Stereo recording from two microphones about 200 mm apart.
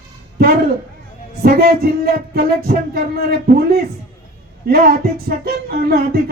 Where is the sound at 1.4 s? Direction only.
50° right (ahead or behind).